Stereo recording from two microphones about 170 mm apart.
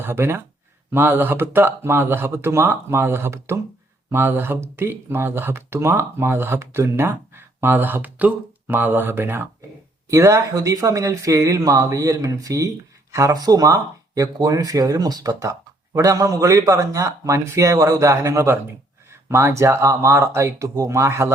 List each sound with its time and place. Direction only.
0.0 s speech: 15° right (ahead or behind)